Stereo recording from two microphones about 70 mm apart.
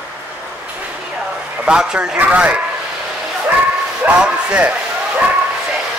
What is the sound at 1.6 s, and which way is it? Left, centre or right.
Speech, centre.